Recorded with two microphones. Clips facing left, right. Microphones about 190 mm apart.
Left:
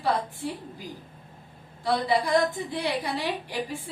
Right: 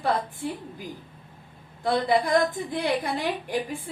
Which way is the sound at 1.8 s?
50° right (ahead or behind).